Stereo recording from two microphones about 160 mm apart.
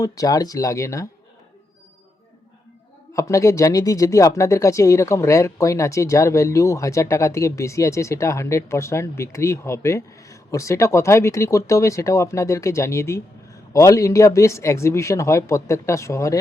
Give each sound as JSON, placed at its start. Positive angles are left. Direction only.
{"t": 0.0, "sound": "speech", "side_deg": 20}
{"t": 3.1, "sound": "speech", "side_deg": 20}